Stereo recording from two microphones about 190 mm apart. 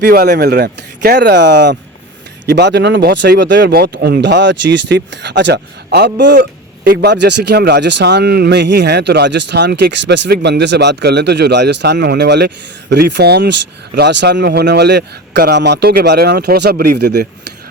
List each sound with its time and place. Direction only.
0.0 s speech: 55° right (ahead or behind)